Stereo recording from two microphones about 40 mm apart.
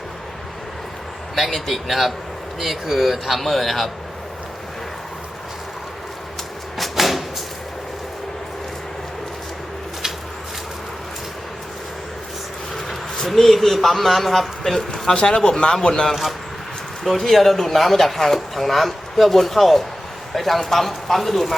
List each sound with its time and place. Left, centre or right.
1.4 s speech: centre
6.7 s a sound: centre
12.7 s speech: centre
17.0 s speech: centre